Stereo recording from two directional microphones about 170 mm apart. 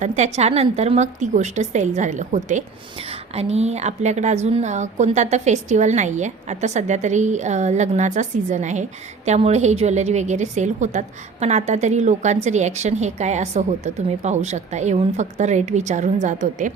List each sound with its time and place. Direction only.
0.0 s a woman's voice: 40° right (ahead or behind)